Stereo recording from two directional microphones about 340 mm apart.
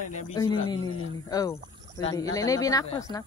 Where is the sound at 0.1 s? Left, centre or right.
Centre.